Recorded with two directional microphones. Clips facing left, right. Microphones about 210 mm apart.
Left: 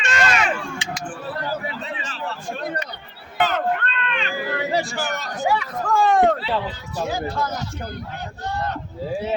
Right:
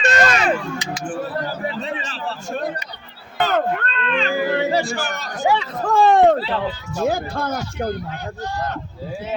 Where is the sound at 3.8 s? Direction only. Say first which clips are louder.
Right 5 dB; 35° right (ahead or behind).